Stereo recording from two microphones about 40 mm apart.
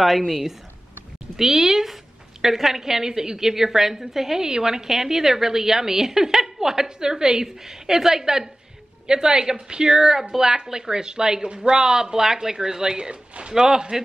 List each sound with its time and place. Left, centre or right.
1.3 s a woman's voice: centre